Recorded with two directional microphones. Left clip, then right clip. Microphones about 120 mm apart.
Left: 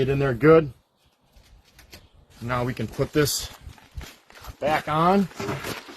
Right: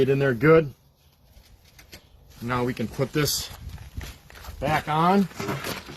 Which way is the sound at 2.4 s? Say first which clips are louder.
Even; 80° left.